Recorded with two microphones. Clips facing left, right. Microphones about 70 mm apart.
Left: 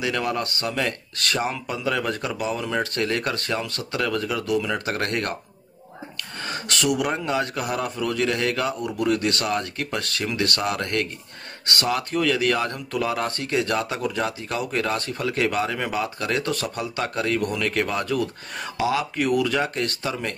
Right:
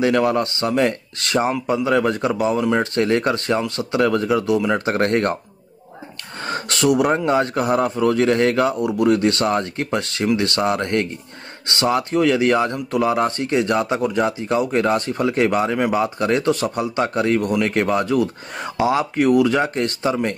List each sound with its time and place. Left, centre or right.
0.0 s speech: right
6.4 s speech: right